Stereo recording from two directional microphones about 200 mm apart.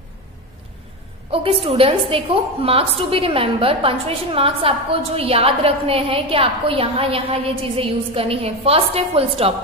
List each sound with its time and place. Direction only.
1.3 s a woman's voice: 30° right (ahead or behind)